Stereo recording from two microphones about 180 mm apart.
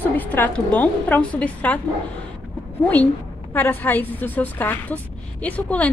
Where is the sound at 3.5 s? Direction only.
10° left (ahead or behind).